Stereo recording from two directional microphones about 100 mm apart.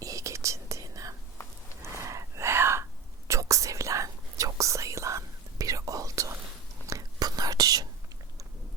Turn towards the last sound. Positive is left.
turn(degrees=-40)  # may be behind; listen again after turning